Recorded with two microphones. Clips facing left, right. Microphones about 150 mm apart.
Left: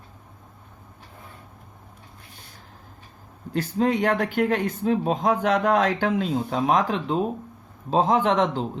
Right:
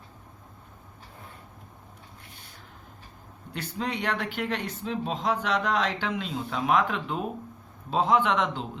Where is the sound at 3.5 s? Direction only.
45° left (ahead or behind).